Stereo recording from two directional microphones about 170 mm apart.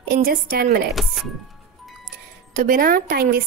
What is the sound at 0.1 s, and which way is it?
Speech, 60° right (ahead or behind).